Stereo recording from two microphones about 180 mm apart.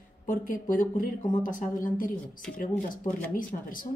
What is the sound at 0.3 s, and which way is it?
A woman's voice, 50° left (ahead or behind).